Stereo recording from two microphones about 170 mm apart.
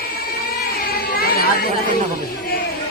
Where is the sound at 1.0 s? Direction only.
65° left (ahead or behind).